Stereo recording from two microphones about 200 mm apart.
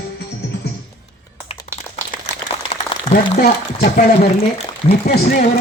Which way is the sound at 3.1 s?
40° left (ahead or behind).